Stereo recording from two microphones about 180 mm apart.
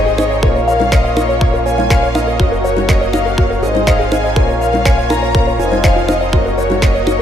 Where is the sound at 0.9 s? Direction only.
Centre (ahead or behind).